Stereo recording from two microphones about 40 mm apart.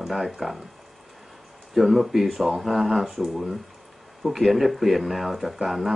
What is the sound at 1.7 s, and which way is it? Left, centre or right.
Speech, centre.